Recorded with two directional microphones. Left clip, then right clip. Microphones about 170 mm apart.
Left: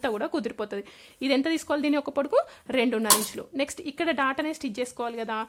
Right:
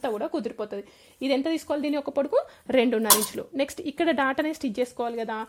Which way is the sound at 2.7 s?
10° right (ahead or behind).